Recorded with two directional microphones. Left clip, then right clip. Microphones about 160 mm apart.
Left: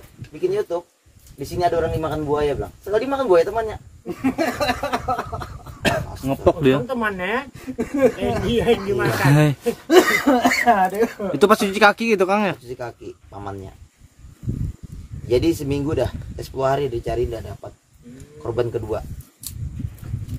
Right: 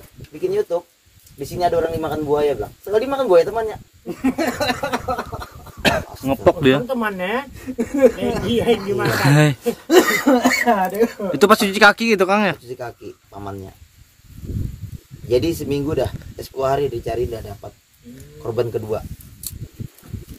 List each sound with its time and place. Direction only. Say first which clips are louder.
0.6 s speech: right 3 dB; 10° left (ahead or behind)
4.0 s a sound: right 1 dB; 30° right (ahead or behind)
5.8 s speech: right 3 dB; 20° right (ahead or behind)
7.5 s speech: right 2 dB; 30° right (ahead or behind)
8.1 s speech: right 1 dB; 5° right (ahead or behind)
9.8 s speech: right 1 dB; 30° right (ahead or behind)
11.3 s speech: right 2 dB; centre (ahead or behind)
12.6 s speech: right 1 dB; 20° left (ahead or behind)
15.2 s speech: even; 15° left (ahead or behind)
18.4 s speech: right 1 dB; 15° left (ahead or behind)